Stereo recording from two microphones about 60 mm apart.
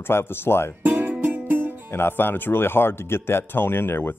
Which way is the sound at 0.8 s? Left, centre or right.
Right.